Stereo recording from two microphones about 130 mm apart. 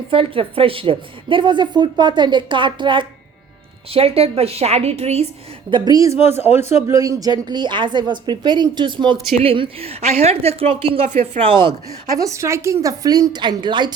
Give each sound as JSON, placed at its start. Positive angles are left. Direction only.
{"t": 0.1, "sound": "a woman's voice", "side_deg": -45}
{"t": 5.7, "sound": "a woman's voice", "side_deg": -30}
{"t": 6.4, "sound": "a man's voice", "side_deg": 55}
{"t": 6.8, "sound": "a woman's voice", "side_deg": -25}
{"t": 12.1, "sound": "a woman's voice", "side_deg": -25}